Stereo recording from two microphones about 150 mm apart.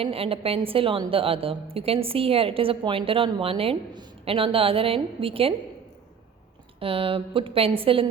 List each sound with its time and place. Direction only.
0.0 s a woman's voice: 40° right (ahead or behind)
6.7 s a woman's voice: 35° right (ahead or behind)